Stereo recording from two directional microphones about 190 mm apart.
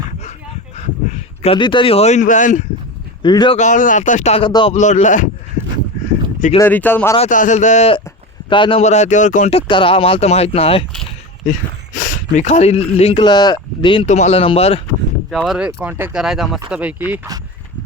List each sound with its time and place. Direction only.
0.8 s speech: 35° left (ahead or behind)
3.2 s speech: 25° left (ahead or behind)
3.6 s a man's voice: 40° left (ahead or behind); by 4.7 s 25° left (ahead or behind)
4.7 s a man's voice: 40° left (ahead or behind)
6.6 s speech: 10° left (ahead or behind)
7.2 s a man's voice: 40° left (ahead or behind)
8.4 s a man's voice: 25° left (ahead or behind)
11.9 s a man's voice: 45° left (ahead or behind); by 14.0 s 25° left (ahead or behind)
14.1 s a man's voice: 35° left (ahead or behind)
15.3 s speech: centre (ahead or behind)